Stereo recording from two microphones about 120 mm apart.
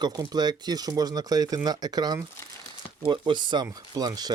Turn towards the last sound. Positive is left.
turn(degrees=-35)  # may be behind; listen again after turning